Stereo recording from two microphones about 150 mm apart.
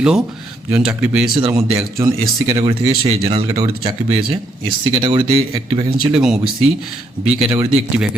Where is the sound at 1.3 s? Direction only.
30° right (ahead or behind).